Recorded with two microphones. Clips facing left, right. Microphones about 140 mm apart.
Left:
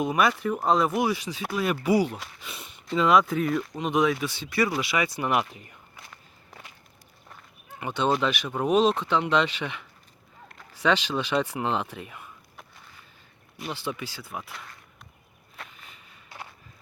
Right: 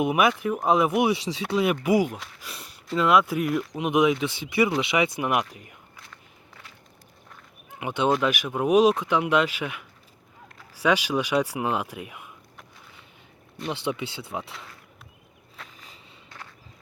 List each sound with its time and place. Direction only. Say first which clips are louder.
0.0 s speech: right 2 dB; 10° right (ahead or behind)
1.1 s speech: right 4 dB; 30° right (ahead or behind)
1.8 s speech: right 1 dB; 15° right (ahead or behind)
2.1 s speech: even; centre (ahead or behind)
5.4 s speech: even; centre (ahead or behind)
6.1 s walk: even; 15° left (ahead or behind)
7.7 s speech: right 2 dB; 15° right (ahead or behind)
13.8 s speech: right 4 dB; 25° right (ahead or behind)